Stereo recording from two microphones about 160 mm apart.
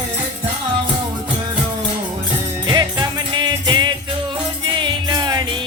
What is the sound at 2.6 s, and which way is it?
Music, 25° right (ahead or behind).